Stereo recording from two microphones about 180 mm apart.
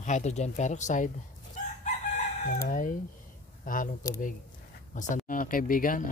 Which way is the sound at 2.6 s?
45° left (ahead or behind).